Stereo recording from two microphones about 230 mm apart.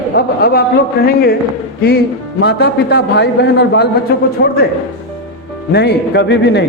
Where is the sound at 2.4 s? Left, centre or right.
Left.